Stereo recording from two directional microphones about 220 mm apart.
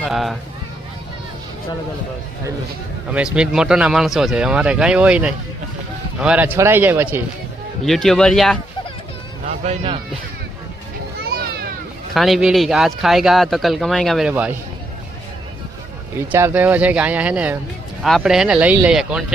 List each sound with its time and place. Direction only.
0.0 s speech: centre (ahead or behind)
3.1 s speech: 5° right (ahead or behind)
7.9 s speech: centre (ahead or behind)
9.6 s speech: 25° right (ahead or behind)
12.1 s speech: centre (ahead or behind)
16.1 s speech: 10° right (ahead or behind)